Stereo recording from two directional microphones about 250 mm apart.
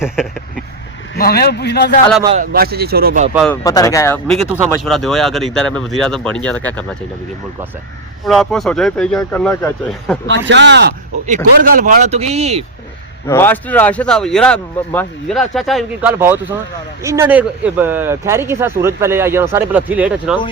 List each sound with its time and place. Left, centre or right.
0.0 s a sound: centre
1.1 s a man's voice: left
2.4 s speech: right
3.3 s speech: centre
3.6 s speech: centre
4.3 s speech: centre
8.2 s speech: centre
10.2 s speech: right
11.6 s speech: right
13.2 s speech: centre